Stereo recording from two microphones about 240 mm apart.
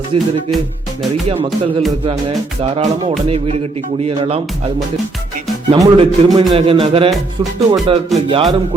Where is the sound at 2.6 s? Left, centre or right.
Right.